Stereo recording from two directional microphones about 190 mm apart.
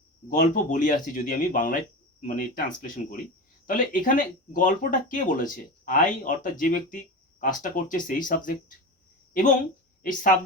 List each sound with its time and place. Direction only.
0.3 s speech: 45° left (ahead or behind)
10.0 s speech: 45° left (ahead or behind)